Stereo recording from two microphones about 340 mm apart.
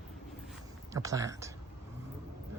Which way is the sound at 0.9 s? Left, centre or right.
Centre.